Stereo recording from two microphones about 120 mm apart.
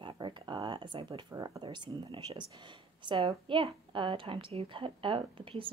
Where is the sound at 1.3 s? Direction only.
30° right (ahead or behind).